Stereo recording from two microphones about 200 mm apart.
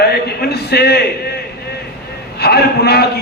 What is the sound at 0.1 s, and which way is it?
Speech, 55° left (ahead or behind).